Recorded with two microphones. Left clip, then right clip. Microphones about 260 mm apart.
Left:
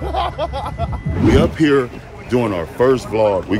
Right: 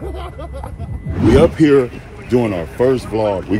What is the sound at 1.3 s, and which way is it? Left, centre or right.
Speech, centre.